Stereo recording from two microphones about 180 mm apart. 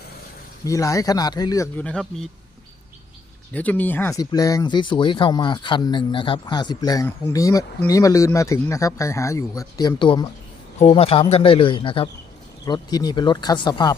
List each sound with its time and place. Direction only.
0.6 s speech: 20° left (ahead or behind)
1.8 s speech: 5° left (ahead or behind)
3.5 s speech: 10° left (ahead or behind)